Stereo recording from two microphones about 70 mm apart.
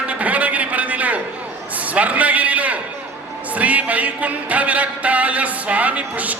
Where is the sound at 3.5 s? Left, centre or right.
Right.